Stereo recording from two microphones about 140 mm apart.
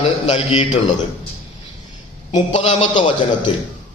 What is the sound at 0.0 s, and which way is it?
Speech, 45° left (ahead or behind).